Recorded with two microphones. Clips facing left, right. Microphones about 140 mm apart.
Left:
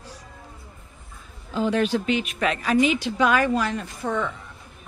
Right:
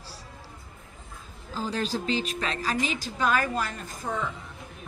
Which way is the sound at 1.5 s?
35° right (ahead or behind).